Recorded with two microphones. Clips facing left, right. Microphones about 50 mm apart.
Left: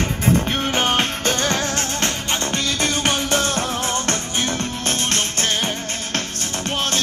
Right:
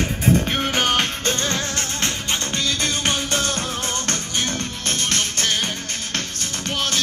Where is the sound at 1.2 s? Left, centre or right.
Left.